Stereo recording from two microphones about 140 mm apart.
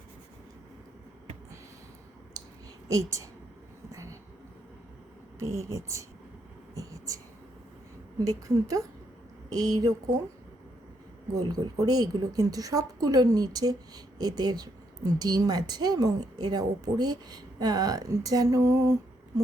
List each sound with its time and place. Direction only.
2.9 s speech: 25° right (ahead or behind)
3.9 s a sound: 25° right (ahead or behind)
5.4 s speech: 20° right (ahead or behind)
6.7 s whispering: 25° right (ahead or behind)
8.2 s speech: 25° right (ahead or behind)
11.3 s speech: 25° right (ahead or behind)